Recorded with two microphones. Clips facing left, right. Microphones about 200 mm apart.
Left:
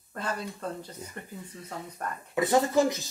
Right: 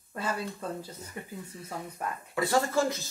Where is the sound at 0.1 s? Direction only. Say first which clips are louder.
Right 1 dB; 5° right (ahead or behind).